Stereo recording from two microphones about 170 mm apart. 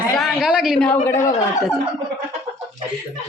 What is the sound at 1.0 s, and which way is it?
Speech, 15° left (ahead or behind).